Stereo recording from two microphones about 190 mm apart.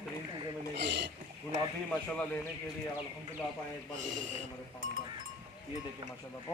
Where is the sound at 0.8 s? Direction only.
60° right (ahead or behind).